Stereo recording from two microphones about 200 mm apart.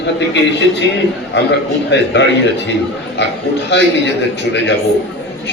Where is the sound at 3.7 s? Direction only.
60° left (ahead or behind).